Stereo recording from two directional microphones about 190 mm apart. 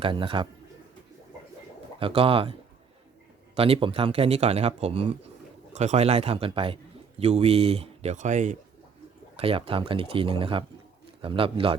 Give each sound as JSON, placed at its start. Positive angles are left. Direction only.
{"t": 0.0, "sound": "speech", "side_deg": -25}
{"t": 2.0, "sound": "speech", "side_deg": -30}